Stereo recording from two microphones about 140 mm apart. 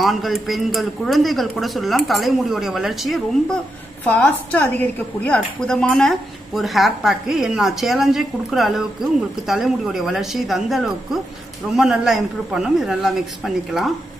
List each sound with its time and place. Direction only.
0.0 s speech: centre (ahead or behind)